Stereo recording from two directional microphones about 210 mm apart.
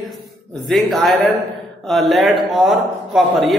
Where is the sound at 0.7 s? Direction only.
Centre (ahead or behind).